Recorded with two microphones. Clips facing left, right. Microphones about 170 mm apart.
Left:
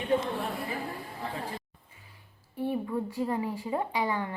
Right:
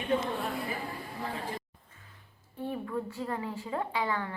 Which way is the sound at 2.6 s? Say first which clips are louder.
Left 4 dB; 15° left (ahead or behind).